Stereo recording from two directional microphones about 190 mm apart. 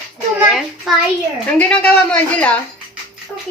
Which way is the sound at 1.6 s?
5° left (ahead or behind).